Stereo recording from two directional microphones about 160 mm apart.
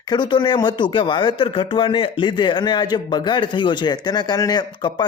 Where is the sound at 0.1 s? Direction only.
30° left (ahead or behind).